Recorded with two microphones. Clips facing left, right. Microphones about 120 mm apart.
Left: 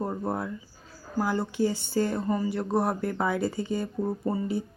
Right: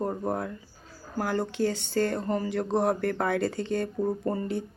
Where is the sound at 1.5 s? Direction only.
65° right (ahead or behind).